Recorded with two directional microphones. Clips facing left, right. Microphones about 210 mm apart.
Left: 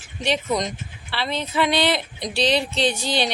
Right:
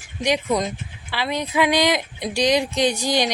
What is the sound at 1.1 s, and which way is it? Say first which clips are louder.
Speech: right 2 dB; 10° right (ahead or behind).